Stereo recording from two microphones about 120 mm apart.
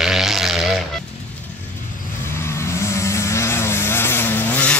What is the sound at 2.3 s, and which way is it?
Vehicle, 20° left (ahead or behind).